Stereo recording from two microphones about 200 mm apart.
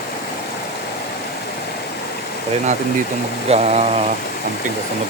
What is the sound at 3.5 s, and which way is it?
Mantra, 30° right (ahead or behind).